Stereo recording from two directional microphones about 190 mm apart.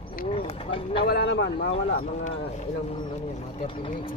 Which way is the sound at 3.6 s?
25° left (ahead or behind).